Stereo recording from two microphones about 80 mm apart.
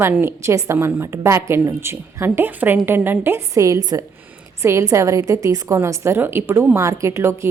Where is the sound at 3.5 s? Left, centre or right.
Right.